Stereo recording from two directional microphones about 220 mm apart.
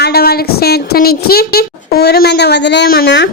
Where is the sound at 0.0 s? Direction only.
45° left (ahead or behind).